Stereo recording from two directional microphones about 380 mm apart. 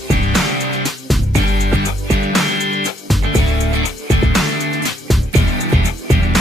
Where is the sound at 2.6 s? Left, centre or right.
Right.